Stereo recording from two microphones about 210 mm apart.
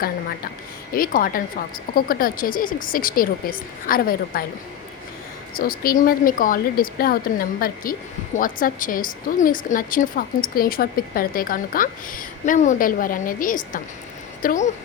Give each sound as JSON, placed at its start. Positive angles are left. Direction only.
{"t": 0.9, "sound": "speech", "side_deg": 45}
{"t": 5.5, "sound": "a woman's voice", "side_deg": 45}